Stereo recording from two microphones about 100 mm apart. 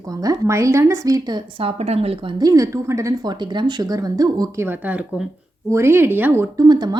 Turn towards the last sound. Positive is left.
turn(degrees=-45)  # may be behind; listen again after turning